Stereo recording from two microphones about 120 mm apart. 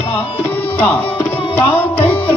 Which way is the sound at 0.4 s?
15° left (ahead or behind).